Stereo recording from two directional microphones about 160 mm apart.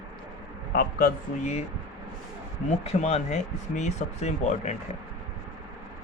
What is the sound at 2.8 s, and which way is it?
Speech, 40° left (ahead or behind).